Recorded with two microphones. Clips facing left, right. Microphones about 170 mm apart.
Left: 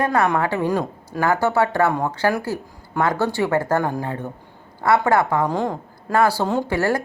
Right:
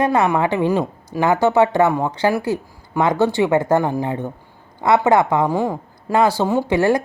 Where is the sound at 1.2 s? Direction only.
20° right (ahead or behind).